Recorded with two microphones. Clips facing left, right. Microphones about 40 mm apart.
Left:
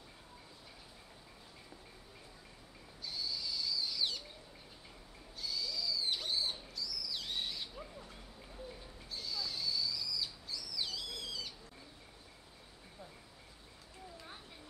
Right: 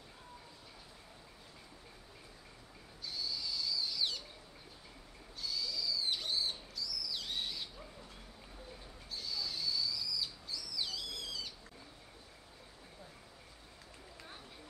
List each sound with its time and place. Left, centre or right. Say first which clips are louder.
3.1 s owl: even; centre
5.4 s owl: even; centre
9.1 s bird: even; centre